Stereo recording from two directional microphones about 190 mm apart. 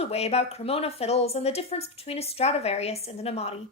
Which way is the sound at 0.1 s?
35° left (ahead or behind).